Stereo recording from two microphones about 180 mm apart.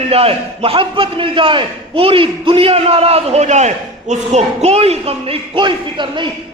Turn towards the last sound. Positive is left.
turn(degrees=-25)  # may be behind; listen again after turning